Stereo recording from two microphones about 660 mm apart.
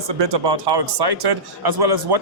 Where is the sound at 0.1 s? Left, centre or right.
Right.